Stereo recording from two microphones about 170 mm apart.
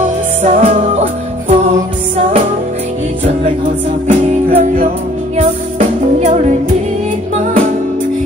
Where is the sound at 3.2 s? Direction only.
50° right (ahead or behind).